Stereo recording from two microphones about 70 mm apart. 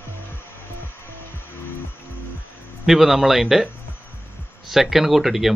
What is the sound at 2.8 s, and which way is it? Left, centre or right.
Speech, centre.